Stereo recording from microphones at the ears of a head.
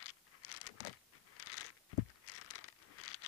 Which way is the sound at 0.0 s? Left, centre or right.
Left.